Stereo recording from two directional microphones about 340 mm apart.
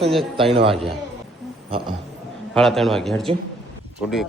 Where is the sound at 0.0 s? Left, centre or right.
Centre.